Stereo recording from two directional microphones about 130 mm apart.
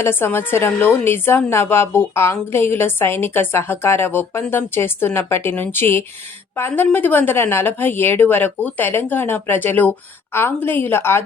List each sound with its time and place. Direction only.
0.0 s a woman's voice: 15° left (ahead or behind)